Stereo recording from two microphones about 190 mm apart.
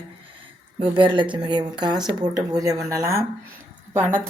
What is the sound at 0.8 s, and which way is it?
A woman's voice, 25° right (ahead or behind).